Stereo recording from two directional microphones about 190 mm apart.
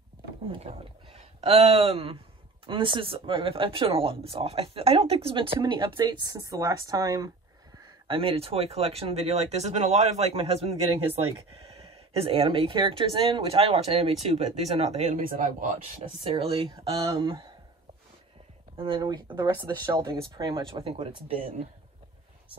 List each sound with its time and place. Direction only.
1.1 s speech: 30° right (ahead or behind)
8.1 s speech: 30° right (ahead or behind)
12.2 s speech: 30° right (ahead or behind); by 15.5 s 45° right (ahead or behind)
16.3 s speech: 30° right (ahead or behind)
18.8 s speech: 25° right (ahead or behind)